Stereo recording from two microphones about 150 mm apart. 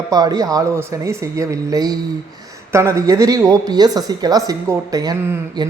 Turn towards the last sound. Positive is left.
turn(degrees=-25)  # may be behind; listen again after turning